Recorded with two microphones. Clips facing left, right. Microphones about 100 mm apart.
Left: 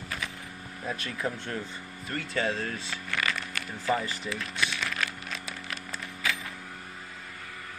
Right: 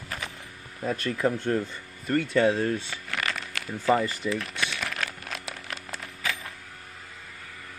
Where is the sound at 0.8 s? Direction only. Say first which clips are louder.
Right 7 dB; 60° right (ahead or behind).